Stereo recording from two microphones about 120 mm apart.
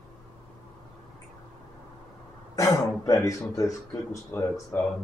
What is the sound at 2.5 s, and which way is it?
A man's voice, 30° left (ahead or behind).